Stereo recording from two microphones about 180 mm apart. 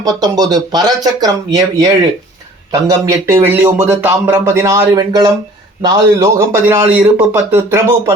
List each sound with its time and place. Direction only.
0.0 s speech: 20° right (ahead or behind)
3.1 s speech: 15° right (ahead or behind)